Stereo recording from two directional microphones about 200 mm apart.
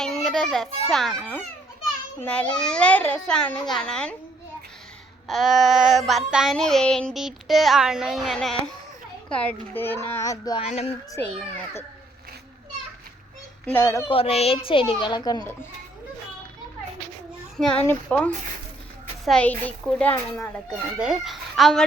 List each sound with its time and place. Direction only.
0.0 s children playing: centre (ahead or behind)
0.9 s child singing: centre (ahead or behind)
5.3 s child singing: centre (ahead or behind)
9.3 s a child's voice: 10° left (ahead or behind)
10.6 s speech: 30° left (ahead or behind)
13.7 s a child's voice: 15° left (ahead or behind)
14.1 s a child's voice: 30° left (ahead or behind)
17.8 s child singing: 5° left (ahead or behind)
19.2 s a child's voice: 5° left (ahead or behind)
19.8 s child singing: 5° left (ahead or behind)